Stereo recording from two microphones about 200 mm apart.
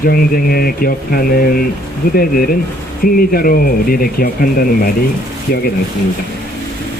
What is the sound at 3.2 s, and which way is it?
Speech, 45° left (ahead or behind).